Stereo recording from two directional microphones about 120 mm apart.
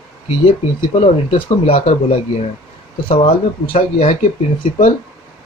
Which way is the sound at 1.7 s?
55° left (ahead or behind).